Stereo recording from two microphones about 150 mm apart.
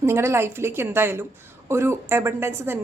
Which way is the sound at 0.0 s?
15° right (ahead or behind).